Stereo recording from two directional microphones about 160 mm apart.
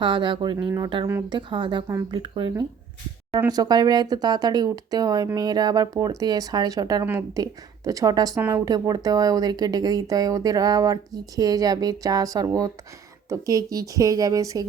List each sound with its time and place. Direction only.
0.0 s speech: 30° right (ahead or behind)
1.9 s speech: 20° right (ahead or behind)
2.1 s speech: 30° right (ahead or behind)